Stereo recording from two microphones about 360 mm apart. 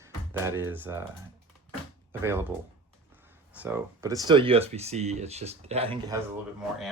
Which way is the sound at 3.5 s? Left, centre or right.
Centre.